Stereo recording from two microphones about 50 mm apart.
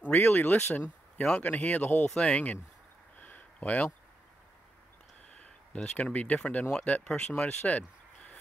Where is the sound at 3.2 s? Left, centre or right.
Left.